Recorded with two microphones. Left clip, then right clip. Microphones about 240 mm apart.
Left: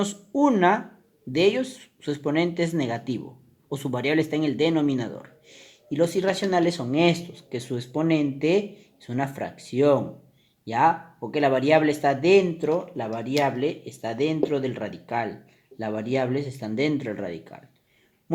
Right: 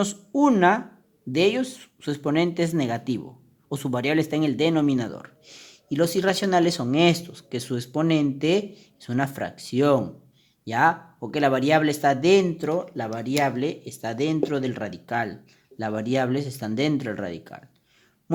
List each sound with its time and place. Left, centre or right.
0.0 s speech: right